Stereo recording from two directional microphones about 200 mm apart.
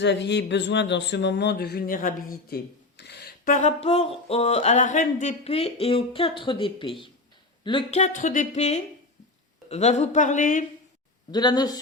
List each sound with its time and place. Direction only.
0.0 s speech: 60° left (ahead or behind); by 2.6 s 45° left (ahead or behind)
3.0 s a sound: 55° left (ahead or behind); by 10.7 s 40° left (ahead or behind)
11.3 s speech: 20° left (ahead or behind)